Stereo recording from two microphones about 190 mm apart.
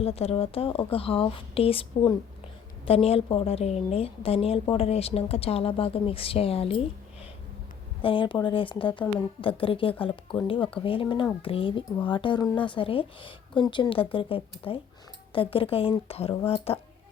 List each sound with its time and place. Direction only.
0.0 s a woman's voice: 30° left (ahead or behind)
8.0 s a woman's voice: 25° left (ahead or behind)